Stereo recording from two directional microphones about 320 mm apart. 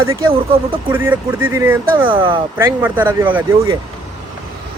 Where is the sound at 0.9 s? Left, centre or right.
Centre.